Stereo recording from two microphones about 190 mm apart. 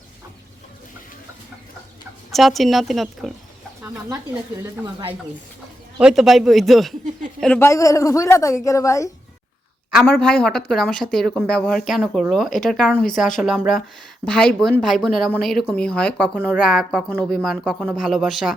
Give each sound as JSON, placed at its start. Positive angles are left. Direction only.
{"t": 2.3, "sound": "speech", "side_deg": 0}
{"t": 6.0, "sound": "a man's voice", "side_deg": -5}
{"t": 9.9, "sound": "speech", "side_deg": 5}